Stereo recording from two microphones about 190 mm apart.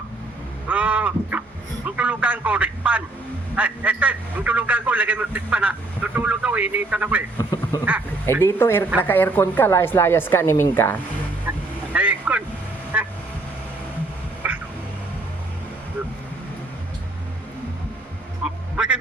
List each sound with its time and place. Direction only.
0.7 s crow: 5° right (ahead or behind)
2.0 s a man's voice: 5° right (ahead or behind)
7.3 s speech: 20° left (ahead or behind)
7.9 s a man's voice: 10° right (ahead or behind)
8.4 s a woman's voice: 10° left (ahead or behind)
11.5 s goose: 10° right (ahead or behind)
11.9 s vehicle: 5° right (ahead or behind)
12.9 s quack: 5° right (ahead or behind)
14.4 s a sound: 10° right (ahead or behind)
18.4 s music: 5° right (ahead or behind)